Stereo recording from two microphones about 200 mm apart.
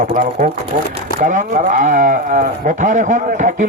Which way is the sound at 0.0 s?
40° right (ahead or behind).